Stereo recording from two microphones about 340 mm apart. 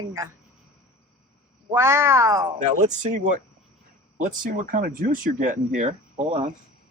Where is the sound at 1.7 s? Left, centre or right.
Centre.